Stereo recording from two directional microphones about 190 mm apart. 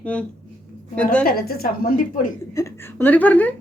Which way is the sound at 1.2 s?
50° left (ahead or behind).